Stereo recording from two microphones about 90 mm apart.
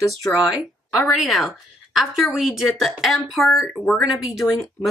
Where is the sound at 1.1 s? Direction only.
Centre (ahead or behind).